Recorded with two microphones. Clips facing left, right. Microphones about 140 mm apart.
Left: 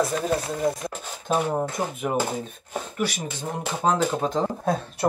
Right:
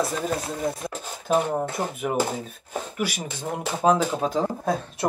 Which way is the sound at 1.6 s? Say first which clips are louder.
Even; centre (ahead or behind).